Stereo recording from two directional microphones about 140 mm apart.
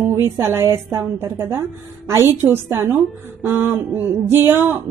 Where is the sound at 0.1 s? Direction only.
15° right (ahead or behind).